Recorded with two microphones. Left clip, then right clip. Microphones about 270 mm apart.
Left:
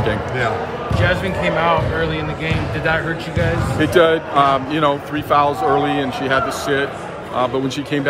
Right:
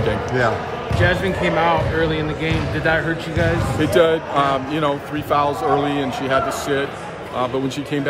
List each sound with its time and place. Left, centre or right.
0.1 s speech: centre
0.9 s speech: right
3.8 s a man's voice: centre